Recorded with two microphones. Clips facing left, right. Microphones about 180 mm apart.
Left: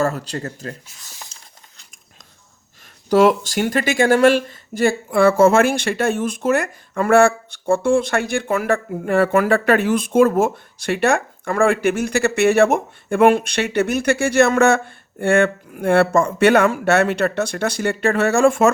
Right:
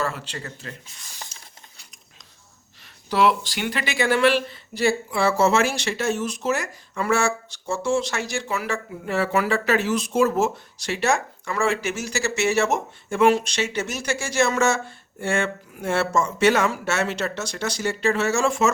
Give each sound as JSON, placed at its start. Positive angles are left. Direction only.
{"t": 0.0, "sound": "speech", "side_deg": 40}
{"t": 3.1, "sound": "speech", "side_deg": 45}